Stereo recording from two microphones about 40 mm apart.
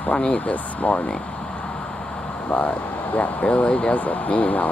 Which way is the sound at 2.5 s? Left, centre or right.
Left.